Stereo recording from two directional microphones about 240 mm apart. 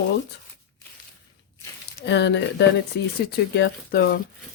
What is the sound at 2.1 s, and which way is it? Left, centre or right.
Speech, left.